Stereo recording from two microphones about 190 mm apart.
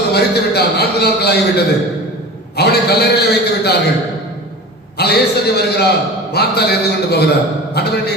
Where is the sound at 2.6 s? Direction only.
60° left (ahead or behind).